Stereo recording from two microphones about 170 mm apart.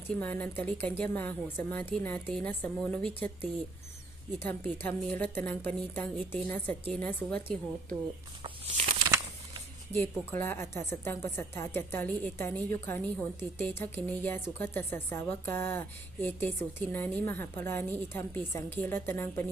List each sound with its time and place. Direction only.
0.2 s a woman's voice: 10° left (ahead or behind)
8.4 s a sound: 30° right (ahead or behind)
9.9 s a woman's voice: 15° left (ahead or behind)